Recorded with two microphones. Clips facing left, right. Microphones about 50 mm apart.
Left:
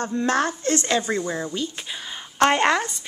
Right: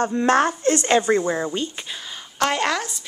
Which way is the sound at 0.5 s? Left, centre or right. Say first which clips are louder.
Right 3 dB; centre.